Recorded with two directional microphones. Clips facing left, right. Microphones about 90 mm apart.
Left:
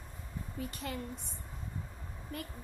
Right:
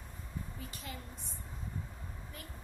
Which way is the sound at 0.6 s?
60° left (ahead or behind).